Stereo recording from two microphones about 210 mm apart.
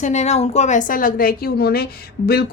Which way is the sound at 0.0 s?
35° left (ahead or behind).